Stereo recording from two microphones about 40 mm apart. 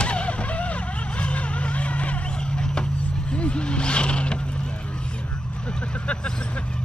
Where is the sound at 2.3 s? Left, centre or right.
Left.